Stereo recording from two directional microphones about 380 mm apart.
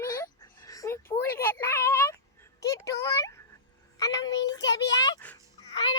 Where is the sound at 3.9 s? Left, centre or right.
Centre.